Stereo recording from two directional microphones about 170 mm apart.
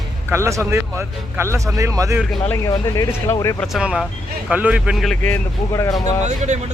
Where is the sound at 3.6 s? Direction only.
5° right (ahead or behind).